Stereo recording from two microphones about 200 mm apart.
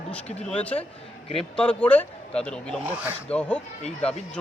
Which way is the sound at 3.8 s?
30° left (ahead or behind).